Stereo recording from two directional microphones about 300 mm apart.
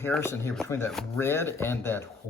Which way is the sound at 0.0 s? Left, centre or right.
Centre.